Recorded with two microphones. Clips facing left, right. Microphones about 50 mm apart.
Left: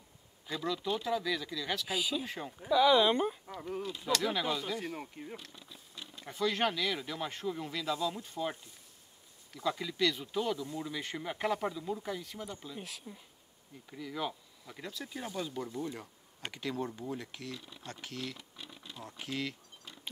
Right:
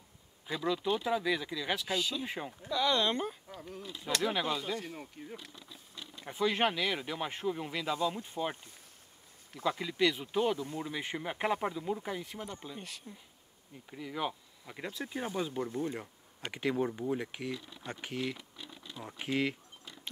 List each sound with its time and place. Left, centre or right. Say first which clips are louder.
0.7 s speech: right 2 dB; centre
1.9 s speech: even; centre
2.2 s speech: right 2 dB; centre
2.6 s speech: left 5 dB; centre
4.0 s speech: right 1 dB; centre
4.7 s speech: left 2 dB; centre
6.2 s speech: right 2 dB; centre
12.7 s speech: left 1 dB; centre
13.8 s speech: right 1 dB; centre